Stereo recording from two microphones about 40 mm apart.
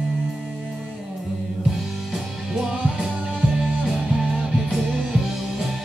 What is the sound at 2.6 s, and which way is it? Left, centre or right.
Music, right.